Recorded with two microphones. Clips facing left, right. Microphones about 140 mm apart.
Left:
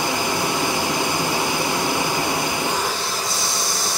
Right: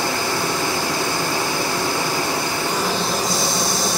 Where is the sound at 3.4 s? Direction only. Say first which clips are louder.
Right 5 dB; 25° right (ahead or behind).